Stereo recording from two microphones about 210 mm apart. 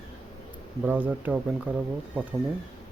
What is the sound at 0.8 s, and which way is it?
Speech, 10° right (ahead or behind).